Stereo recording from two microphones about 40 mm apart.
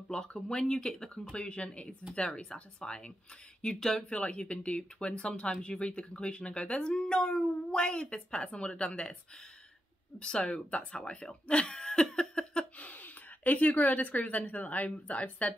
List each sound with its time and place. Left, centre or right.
0.1 s speech: centre
4.1 s speech: left
10.1 s speech: left
12.7 s speech: left